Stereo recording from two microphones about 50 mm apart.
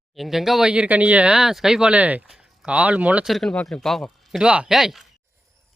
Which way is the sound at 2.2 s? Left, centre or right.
Centre.